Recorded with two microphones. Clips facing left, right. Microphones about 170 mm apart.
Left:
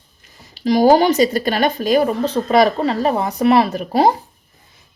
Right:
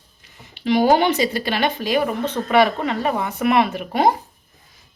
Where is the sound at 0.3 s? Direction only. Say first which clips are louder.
Left 3 dB; 40° left (ahead or behind).